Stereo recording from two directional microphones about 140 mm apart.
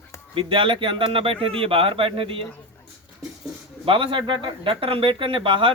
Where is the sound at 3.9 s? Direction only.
40° right (ahead or behind).